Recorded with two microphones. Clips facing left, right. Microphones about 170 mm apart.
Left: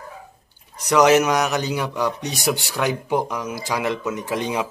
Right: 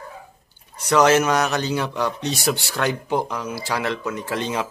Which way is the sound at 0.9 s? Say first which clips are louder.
Left 1 dB; 15° left (ahead or behind).